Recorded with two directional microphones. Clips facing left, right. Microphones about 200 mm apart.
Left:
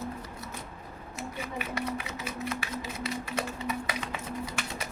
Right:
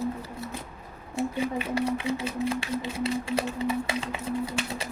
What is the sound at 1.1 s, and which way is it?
Speech, 30° right (ahead or behind).